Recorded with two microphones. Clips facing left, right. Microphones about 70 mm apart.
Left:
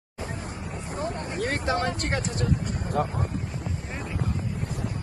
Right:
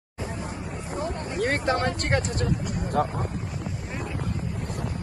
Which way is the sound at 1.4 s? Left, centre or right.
Right.